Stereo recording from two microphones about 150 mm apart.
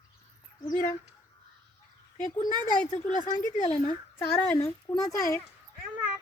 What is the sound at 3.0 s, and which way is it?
Speech, 55° left (ahead or behind).